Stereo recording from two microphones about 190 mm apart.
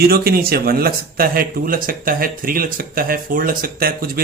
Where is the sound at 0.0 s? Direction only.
50° right (ahead or behind).